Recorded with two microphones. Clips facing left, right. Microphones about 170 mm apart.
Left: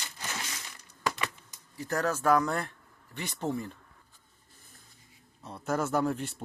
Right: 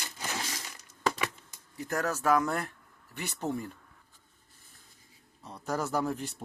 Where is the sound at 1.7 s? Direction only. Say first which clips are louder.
Left 1 dB; 20° right (ahead or behind).